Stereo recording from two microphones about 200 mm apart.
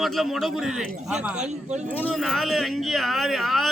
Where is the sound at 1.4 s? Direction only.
35° right (ahead or behind).